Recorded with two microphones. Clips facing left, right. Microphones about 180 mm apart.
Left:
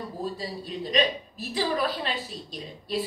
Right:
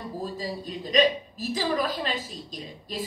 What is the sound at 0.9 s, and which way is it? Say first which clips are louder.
A woman's voice: right 4 dB; 45° right (ahead or behind).